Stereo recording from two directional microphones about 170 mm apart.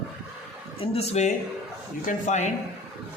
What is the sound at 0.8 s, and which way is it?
A woman's voice, 35° left (ahead or behind).